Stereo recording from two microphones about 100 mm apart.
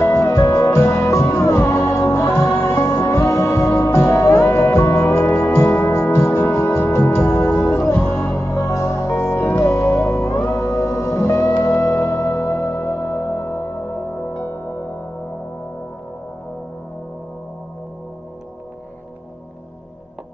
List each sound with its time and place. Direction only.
0.0 s music: 35° left (ahead or behind)